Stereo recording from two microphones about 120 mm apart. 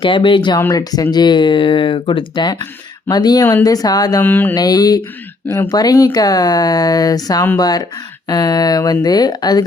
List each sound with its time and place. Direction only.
0.0 s speech: 45° left (ahead or behind)
0.7 s speech: 30° left (ahead or behind)
4.2 s mantra: 15° left (ahead or behind)
4.5 s speech: 30° left (ahead or behind)